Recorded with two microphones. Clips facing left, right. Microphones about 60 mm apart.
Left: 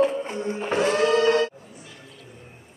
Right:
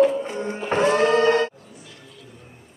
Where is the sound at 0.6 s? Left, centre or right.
Right.